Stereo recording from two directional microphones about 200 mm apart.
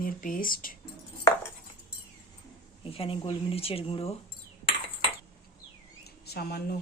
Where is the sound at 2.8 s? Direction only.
30° left (ahead or behind).